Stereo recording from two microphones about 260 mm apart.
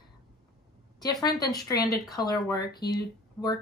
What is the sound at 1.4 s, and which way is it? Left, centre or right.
Speech, centre.